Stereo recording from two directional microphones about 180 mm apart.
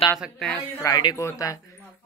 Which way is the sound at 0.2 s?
5° left (ahead or behind).